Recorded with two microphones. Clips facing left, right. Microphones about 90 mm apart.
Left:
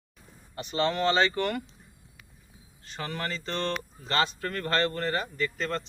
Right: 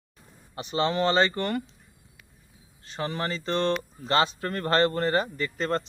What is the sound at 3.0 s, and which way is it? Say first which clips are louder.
Speech: right 4 dB; 20° right (ahead or behind).